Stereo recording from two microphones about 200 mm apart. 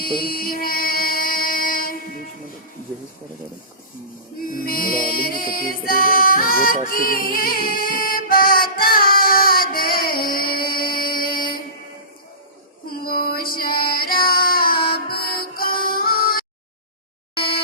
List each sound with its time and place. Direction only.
0.0 s music: 50° left (ahead or behind)
4.5 s music: 45° left (ahead or behind)
12.9 s music: 50° left (ahead or behind)
17.3 s a sound: 50° left (ahead or behind)